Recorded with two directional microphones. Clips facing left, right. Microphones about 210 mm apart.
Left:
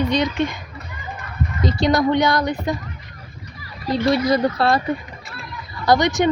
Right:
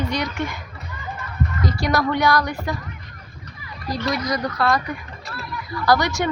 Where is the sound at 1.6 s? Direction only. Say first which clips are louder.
Left 5 dB; 25° left (ahead or behind).